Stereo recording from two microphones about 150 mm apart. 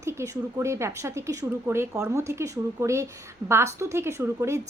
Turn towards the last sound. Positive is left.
turn(degrees=-20)  # may be behind; listen again after turning